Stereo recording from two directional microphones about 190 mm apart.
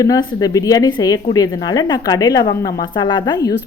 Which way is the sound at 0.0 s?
20° left (ahead or behind).